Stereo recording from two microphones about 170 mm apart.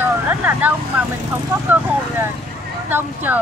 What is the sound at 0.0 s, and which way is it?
Speech, 10° right (ahead or behind).